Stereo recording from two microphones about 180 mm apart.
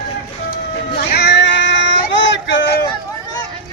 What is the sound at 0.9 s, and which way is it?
Cat, 65° left (ahead or behind).